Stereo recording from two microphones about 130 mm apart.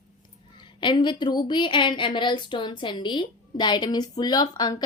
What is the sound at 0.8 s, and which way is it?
A woman's voice, 35° left (ahead or behind).